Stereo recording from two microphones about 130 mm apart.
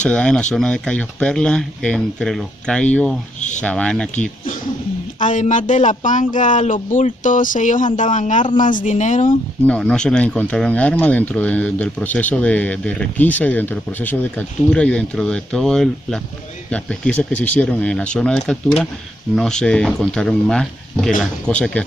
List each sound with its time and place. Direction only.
0.0 s speech: 10° left (ahead or behind)
3.3 s a sound: 65° left (ahead or behind)
3.6 s speech: 10° left (ahead or behind)
5.2 s speech: 75° left (ahead or behind)
8.5 s speech: 90° left; by 9.3 s 70° left (ahead or behind)
9.7 s speech: 5° left (ahead or behind)